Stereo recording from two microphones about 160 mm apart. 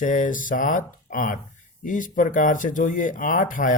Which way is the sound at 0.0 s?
55° left (ahead or behind).